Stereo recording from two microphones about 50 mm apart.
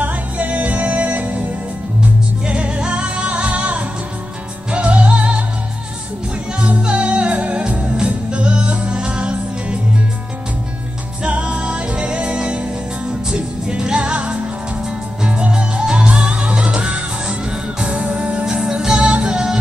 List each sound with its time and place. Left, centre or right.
0.0 s music: right
2.4 s music: right
6.6 s music: right
11.2 s music: right; by 19.6 s centre